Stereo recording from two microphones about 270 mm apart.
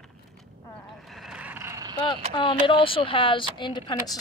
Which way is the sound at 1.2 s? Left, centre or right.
Centre.